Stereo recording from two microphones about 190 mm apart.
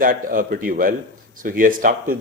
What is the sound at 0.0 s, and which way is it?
Speech, 45° right (ahead or behind).